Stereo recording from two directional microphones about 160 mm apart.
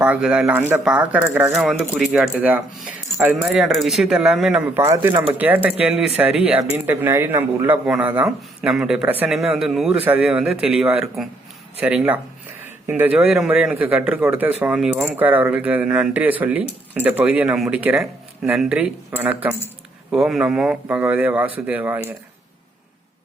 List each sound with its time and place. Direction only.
0.0 s speech: 5° right (ahead or behind)
4.8 s speech: 15° right (ahead or behind)